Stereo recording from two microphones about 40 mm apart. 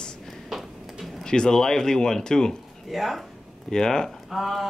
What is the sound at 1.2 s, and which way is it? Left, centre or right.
Speech, centre.